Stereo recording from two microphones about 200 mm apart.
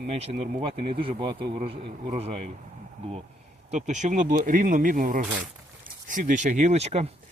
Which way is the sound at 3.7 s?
35° right (ahead or behind).